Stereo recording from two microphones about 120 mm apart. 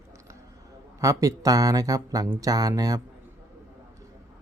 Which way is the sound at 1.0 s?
30° right (ahead or behind).